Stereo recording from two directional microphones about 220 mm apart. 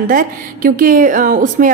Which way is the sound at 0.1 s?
40° right (ahead or behind).